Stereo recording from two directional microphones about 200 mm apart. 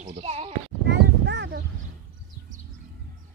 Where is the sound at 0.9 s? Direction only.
60° right (ahead or behind).